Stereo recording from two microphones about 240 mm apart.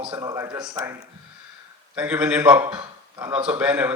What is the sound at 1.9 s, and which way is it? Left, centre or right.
A man's voice, centre.